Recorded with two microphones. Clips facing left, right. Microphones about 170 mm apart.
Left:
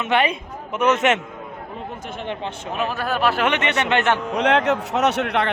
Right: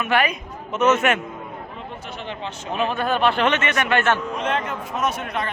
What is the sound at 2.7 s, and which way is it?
Speech, 5° left (ahead or behind).